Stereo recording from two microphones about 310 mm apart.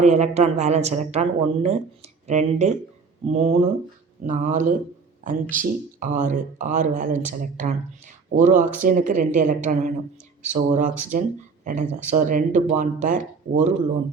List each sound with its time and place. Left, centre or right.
0.0 s speech: right